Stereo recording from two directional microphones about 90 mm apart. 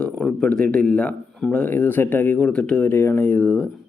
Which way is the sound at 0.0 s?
5° left (ahead or behind).